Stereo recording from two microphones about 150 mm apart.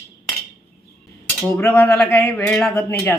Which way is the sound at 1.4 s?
15° left (ahead or behind).